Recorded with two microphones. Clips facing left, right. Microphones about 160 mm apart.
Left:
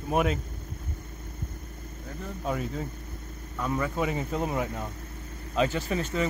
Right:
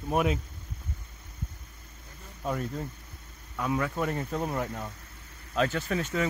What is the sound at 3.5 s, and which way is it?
Speech, 10° right (ahead or behind).